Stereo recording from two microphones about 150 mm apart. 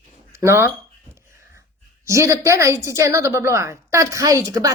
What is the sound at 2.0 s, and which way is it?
A woman's voice, 20° right (ahead or behind).